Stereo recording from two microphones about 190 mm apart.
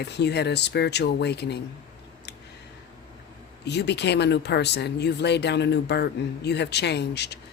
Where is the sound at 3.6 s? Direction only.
65° left (ahead or behind).